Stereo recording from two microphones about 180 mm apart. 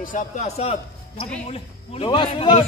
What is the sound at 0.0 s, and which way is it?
A man's voice, 45° left (ahead or behind).